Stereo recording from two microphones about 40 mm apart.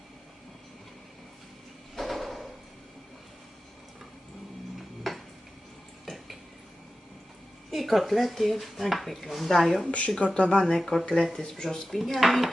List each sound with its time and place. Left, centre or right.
2.0 s drawer open or close: centre
5.1 s dishes: centre
6.1 s a sound: centre
7.7 s speech: centre
10.3 s speech: left
10.6 s speech: centre
11.9 s speech: centre